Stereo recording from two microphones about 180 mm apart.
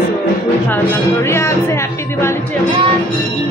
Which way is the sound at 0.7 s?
15° left (ahead or behind).